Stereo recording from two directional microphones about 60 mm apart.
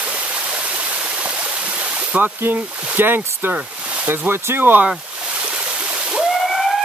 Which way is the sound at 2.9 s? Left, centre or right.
Right.